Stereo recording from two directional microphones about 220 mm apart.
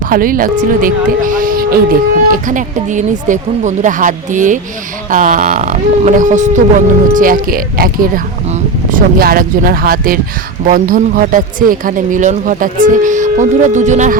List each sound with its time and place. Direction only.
0.1 s speech: 40° right (ahead or behind)